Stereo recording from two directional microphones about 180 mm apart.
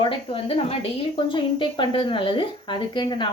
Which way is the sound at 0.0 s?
30° left (ahead or behind).